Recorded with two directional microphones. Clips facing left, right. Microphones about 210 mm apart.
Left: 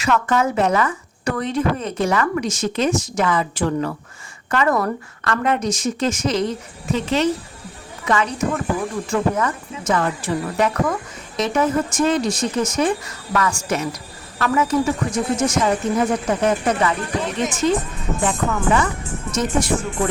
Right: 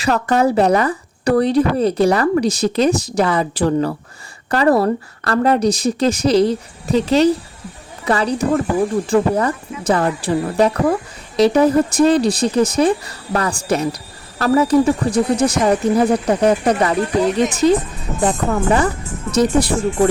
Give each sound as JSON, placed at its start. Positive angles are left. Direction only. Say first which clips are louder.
{"t": 0.0, "sound": "speech", "louder": "right 3 dB", "side_deg": -35}